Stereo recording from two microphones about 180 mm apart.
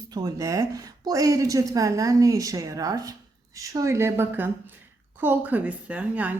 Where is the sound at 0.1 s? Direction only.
20° right (ahead or behind).